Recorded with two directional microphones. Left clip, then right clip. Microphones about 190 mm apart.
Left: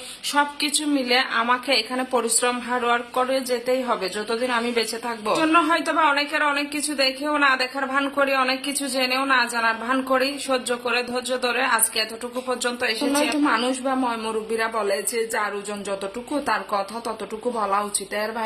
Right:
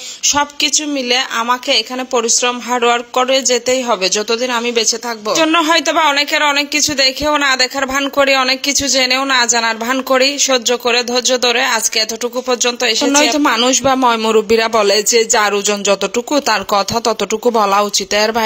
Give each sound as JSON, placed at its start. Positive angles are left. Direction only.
{"t": 0.3, "sound": "a man's voice", "side_deg": -30}